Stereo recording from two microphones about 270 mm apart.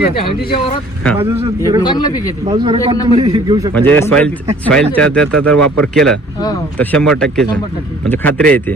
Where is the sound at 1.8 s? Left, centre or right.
Centre.